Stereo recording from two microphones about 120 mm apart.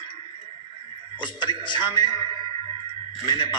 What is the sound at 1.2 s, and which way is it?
Speech, 40° left (ahead or behind).